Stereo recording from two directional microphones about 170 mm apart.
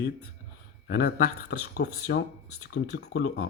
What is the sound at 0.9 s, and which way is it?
A man's voice, 70° left (ahead or behind).